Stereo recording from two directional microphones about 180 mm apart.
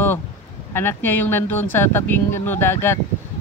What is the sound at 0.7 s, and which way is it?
Speech, 10° left (ahead or behind).